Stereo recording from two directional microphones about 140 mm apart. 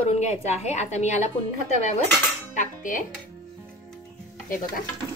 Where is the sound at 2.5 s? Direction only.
70° left (ahead or behind).